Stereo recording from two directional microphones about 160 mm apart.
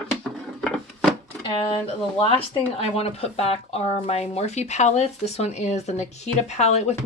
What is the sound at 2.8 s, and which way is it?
Speech, 40° left (ahead or behind).